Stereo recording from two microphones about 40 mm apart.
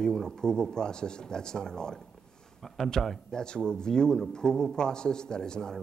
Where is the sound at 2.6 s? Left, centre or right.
Centre.